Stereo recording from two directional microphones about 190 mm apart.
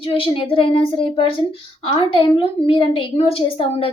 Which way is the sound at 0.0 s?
30° left (ahead or behind).